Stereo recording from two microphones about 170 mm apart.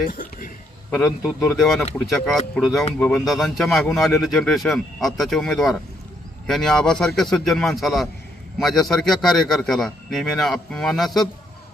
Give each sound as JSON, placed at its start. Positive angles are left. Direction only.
{"t": 0.0, "sound": "a man's voice", "side_deg": 55}
{"t": 0.9, "sound": "a man's voice", "side_deg": 0}